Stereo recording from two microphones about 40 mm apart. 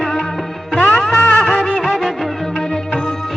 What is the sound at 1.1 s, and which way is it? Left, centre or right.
Music, left.